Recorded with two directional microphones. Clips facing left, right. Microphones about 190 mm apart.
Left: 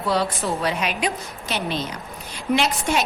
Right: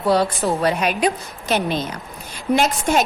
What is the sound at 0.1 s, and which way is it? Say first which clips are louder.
A woman's voice: right 5 dB; 40° right (ahead or behind).